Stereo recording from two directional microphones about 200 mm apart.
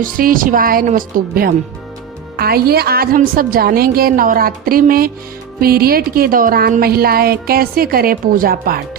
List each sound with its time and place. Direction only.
0.0 s speech: 45° right (ahead or behind)